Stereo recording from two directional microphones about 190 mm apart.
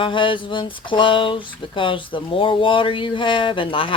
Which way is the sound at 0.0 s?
25° left (ahead or behind).